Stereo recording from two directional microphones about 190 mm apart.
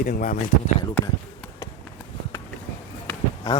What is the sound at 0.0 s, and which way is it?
Speech, 45° left (ahead or behind).